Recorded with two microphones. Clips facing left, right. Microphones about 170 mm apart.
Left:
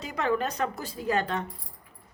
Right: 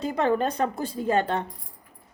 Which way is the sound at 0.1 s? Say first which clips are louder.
Right 3 dB; 30° right (ahead or behind).